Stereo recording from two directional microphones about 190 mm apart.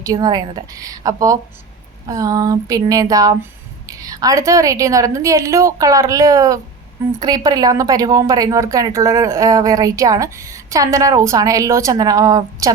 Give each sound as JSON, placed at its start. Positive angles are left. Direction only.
{"t": 0.0, "sound": "speech", "side_deg": -20}